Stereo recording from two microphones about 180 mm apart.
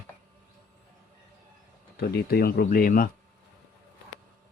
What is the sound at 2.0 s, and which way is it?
Speech, 60° left (ahead or behind).